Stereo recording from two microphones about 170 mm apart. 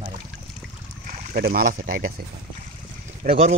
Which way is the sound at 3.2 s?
55° right (ahead or behind).